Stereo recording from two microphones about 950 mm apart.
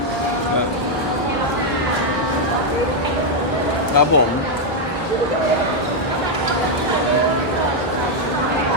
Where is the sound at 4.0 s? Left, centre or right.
Centre.